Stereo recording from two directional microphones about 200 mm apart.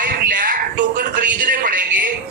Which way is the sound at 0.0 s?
45° right (ahead or behind).